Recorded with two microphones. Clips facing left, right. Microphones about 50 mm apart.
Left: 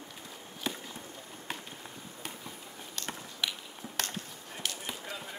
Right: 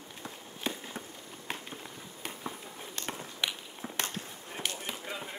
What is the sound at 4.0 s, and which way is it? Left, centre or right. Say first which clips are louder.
Basketball bounce: even; right.